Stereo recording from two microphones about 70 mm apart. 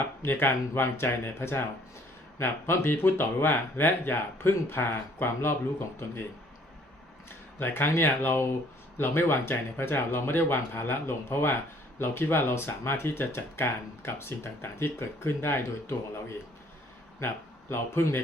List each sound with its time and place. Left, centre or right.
0.2 s speech: left
7.3 s speech: left
17.2 s speech: left